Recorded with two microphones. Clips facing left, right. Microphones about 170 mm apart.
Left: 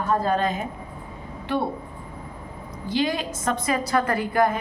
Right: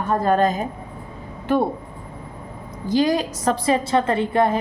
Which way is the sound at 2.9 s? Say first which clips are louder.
Right 6 dB; 40° right (ahead or behind).